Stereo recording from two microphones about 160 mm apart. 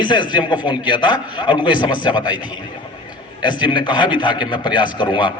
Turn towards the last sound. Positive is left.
turn(degrees=30)  # may be behind; listen again after turning